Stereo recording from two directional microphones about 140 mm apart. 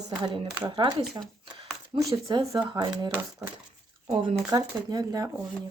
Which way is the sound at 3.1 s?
15° right (ahead or behind).